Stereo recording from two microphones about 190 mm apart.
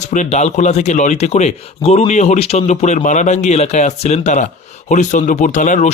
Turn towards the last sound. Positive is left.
turn(degrees=40)  # may be behind; listen again after turning